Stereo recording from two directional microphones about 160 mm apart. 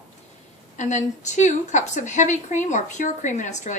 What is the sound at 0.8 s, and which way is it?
A woman's voice, 50° left (ahead or behind).